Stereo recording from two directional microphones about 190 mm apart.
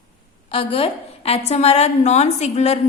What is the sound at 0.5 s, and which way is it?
A woman's voice, 30° left (ahead or behind).